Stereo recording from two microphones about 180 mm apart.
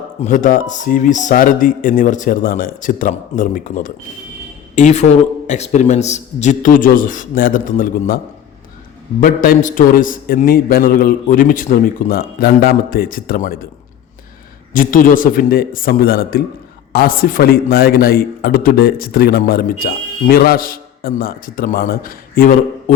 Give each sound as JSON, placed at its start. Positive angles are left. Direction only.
{"t": 0.2, "sound": "a man's voice", "side_deg": 45}
{"t": 9.2, "sound": "a man's voice", "side_deg": 50}
{"t": 14.7, "sound": "a man's voice", "side_deg": 50}